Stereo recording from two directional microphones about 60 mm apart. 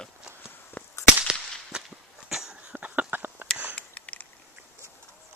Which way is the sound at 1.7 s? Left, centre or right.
Centre.